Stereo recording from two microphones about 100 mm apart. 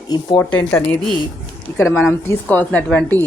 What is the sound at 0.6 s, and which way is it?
Speech, 25° left (ahead or behind).